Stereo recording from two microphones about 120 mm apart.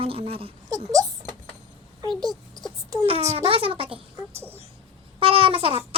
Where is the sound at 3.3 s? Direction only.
50° right (ahead or behind).